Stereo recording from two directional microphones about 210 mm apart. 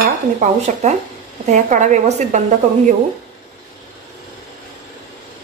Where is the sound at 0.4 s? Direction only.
35° right (ahead or behind).